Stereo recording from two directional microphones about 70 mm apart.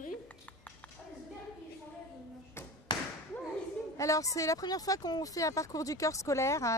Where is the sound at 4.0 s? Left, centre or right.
Left.